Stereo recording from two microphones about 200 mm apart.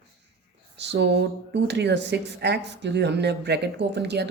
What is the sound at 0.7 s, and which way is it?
Speech, 60° right (ahead or behind).